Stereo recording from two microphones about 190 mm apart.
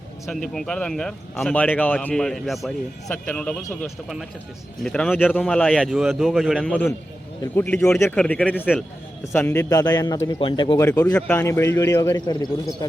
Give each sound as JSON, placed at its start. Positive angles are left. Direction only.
{"t": 0.3, "sound": "speech", "side_deg": 5}
{"t": 7.4, "sound": "a man's voice", "side_deg": 10}
{"t": 10.8, "sound": "a man's voice", "side_deg": 10}